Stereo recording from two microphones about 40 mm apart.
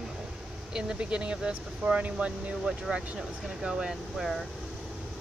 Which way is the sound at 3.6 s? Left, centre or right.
Right.